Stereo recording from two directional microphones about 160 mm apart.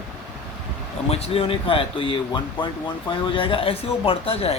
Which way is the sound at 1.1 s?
35° left (ahead or behind).